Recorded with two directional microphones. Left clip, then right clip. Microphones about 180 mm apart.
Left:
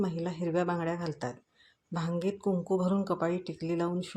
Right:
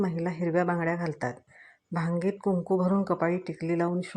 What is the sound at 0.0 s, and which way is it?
Speech, 20° right (ahead or behind).